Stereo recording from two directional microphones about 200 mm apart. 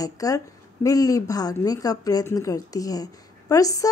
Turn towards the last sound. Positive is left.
turn(degrees=15)  # may be behind; listen again after turning